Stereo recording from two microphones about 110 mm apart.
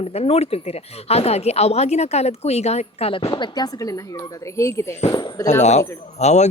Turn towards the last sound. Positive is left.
turn(degrees=90)